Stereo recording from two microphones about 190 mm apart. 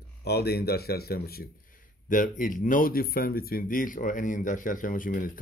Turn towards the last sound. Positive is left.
turn(degrees=45)  # may be behind; listen again after turning